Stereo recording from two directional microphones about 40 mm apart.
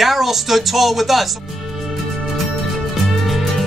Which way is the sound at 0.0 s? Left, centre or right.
Centre.